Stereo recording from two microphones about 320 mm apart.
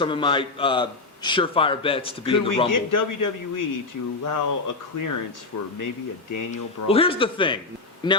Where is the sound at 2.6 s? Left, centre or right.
Left.